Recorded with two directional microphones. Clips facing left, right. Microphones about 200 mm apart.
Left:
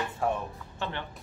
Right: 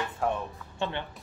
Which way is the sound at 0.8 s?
20° right (ahead or behind).